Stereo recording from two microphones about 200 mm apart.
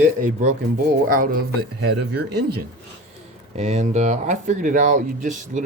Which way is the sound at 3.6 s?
35° right (ahead or behind).